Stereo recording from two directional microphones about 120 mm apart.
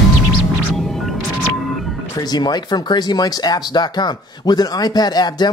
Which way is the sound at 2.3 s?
35° left (ahead or behind).